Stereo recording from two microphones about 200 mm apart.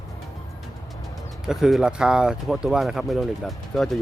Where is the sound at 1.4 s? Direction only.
5° right (ahead or behind).